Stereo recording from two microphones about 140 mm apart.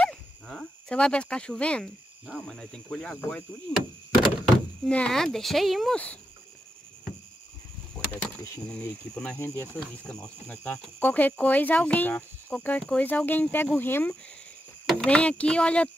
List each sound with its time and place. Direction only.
0.0 s dog: 5° left (ahead or behind)
2.2 s speech: centre (ahead or behind)
3.3 s door: 5° left (ahead or behind)
4.8 s speech: 5° left (ahead or behind)
8.1 s speech: 10° left (ahead or behind)
9.4 s speech: 15° left (ahead or behind)
14.9 s speech: 5° left (ahead or behind)